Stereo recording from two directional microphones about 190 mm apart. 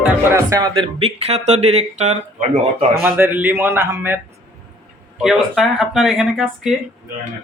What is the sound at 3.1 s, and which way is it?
Speech, 10° right (ahead or behind).